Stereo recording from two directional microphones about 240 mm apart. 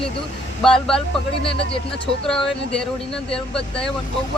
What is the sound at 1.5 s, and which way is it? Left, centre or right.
Speech, left.